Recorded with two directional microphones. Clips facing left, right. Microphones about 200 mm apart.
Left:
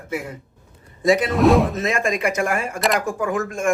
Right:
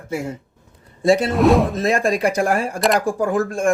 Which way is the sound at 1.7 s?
35° right (ahead or behind).